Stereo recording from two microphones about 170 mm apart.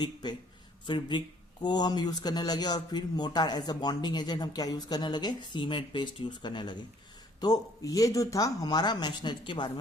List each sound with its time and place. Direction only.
0.0 s speech: 25° left (ahead or behind)